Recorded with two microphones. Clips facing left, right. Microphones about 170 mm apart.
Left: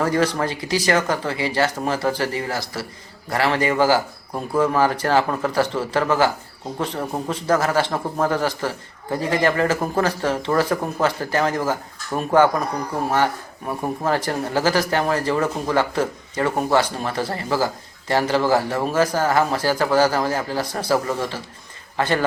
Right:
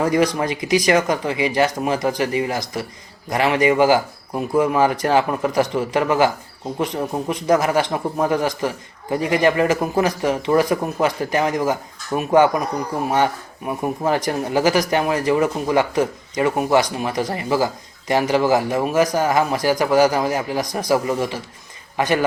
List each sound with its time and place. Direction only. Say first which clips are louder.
0.0 s a man's voice: right 2 dB; 15° right (ahead or behind)